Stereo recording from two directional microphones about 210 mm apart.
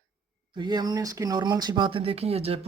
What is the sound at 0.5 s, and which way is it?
Speech, 20° right (ahead or behind).